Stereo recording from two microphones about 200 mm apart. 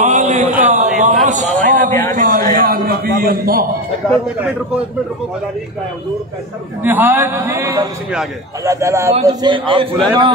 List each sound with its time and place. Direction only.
0.0 s a sound: 35° right (ahead or behind)
2.1 s a man's voice: 40° right (ahead or behind)
4.4 s a man's voice: 5° right (ahead or behind)
6.8 s a man's voice: 10° right (ahead or behind); by 10.3 s 25° right (ahead or behind)